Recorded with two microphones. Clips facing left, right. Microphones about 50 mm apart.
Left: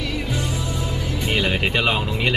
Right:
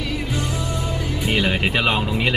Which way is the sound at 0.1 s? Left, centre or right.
Centre.